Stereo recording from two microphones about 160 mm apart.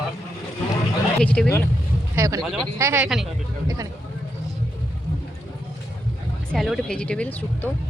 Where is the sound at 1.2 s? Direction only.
5° left (ahead or behind).